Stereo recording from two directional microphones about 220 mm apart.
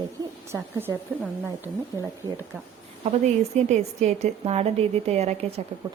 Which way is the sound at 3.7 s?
30° right (ahead or behind).